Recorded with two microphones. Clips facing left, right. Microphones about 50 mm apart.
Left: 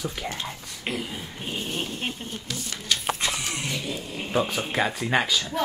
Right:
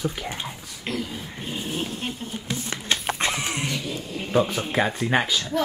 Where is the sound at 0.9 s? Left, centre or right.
Centre.